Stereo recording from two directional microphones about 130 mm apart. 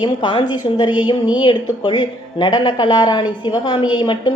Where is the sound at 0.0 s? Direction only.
35° left (ahead or behind).